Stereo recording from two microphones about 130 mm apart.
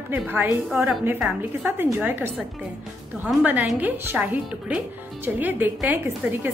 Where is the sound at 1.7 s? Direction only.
15° right (ahead or behind).